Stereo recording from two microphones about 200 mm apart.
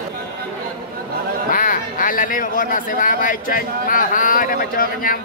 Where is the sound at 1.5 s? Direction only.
40° left (ahead or behind).